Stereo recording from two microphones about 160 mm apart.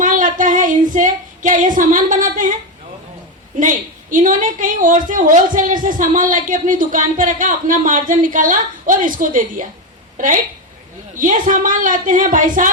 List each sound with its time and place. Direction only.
0.0 s female singing: 55° right (ahead or behind)
3.5 s a woman's voice: 55° right (ahead or behind)